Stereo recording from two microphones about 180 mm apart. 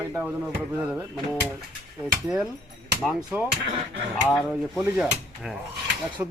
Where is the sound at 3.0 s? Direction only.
5° right (ahead or behind).